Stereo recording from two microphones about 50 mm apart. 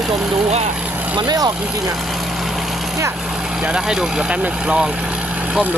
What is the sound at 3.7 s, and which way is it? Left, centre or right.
Speech, centre.